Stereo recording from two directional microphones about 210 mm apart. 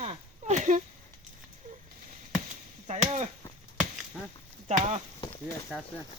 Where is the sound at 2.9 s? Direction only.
35° right (ahead or behind).